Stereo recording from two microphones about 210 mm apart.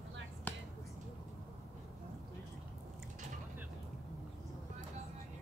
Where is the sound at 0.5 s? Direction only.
5° left (ahead or behind).